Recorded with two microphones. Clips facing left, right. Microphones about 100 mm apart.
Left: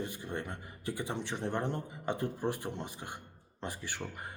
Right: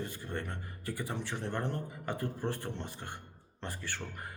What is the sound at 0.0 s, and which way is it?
Speech, 15° left (ahead or behind).